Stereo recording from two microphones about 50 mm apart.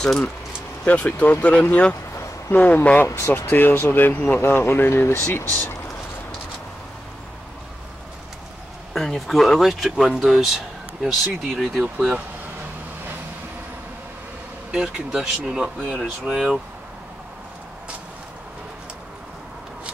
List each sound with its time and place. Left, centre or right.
0.0 s speech: centre
0.8 s speech: left
3.2 s speech: left
3.4 s speech: left
4.4 s speech: left
8.9 s speech: centre
14.7 s speech: centre